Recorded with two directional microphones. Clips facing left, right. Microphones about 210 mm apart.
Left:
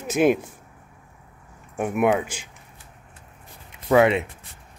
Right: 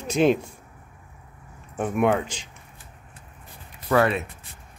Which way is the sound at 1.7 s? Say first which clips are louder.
Left 1 dB; 10° left (ahead or behind).